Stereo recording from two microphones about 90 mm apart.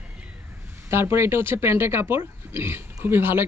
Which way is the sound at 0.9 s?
30° right (ahead or behind).